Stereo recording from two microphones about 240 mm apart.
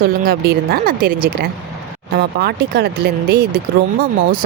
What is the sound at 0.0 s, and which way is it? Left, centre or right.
Speech, right.